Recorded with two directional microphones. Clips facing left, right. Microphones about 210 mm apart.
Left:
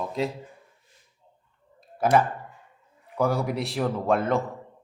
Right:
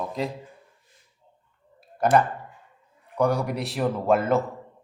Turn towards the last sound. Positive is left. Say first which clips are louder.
# right 2 dB
turn(degrees=-5)  # may be behind; listen again after turning